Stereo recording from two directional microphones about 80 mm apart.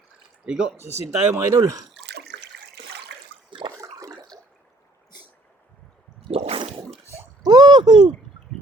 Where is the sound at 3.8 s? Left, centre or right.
Right.